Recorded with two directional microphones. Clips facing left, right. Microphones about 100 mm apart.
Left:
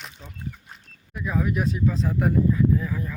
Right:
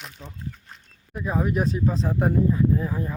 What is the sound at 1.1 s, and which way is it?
Speech, 35° right (ahead or behind).